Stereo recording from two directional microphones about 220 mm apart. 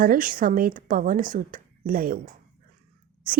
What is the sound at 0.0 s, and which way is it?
Speech, 40° right (ahead or behind).